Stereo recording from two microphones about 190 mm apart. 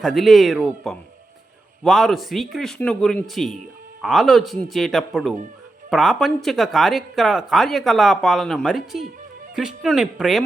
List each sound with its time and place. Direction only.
0.0 s speech: centre (ahead or behind)